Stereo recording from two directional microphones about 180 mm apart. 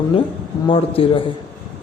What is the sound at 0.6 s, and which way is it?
Speech, 30° left (ahead or behind).